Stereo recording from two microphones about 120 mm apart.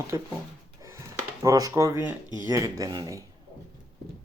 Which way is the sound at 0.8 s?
25° right (ahead or behind).